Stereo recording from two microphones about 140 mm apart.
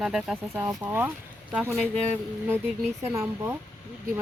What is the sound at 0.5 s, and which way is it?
Speech, 15° right (ahead or behind).